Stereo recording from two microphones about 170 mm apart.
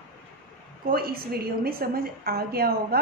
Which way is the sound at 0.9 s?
65° right (ahead or behind).